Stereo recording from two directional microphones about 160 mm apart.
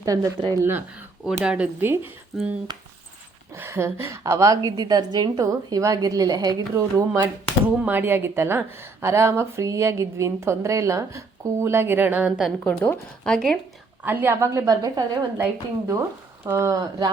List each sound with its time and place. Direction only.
0.0 s a woman's voice: 20° right (ahead or behind)
3.5 s a woman's voice: 15° right (ahead or behind)
12.6 s speech: 10° left (ahead or behind)
14.0 s a woman's voice: 10° right (ahead or behind)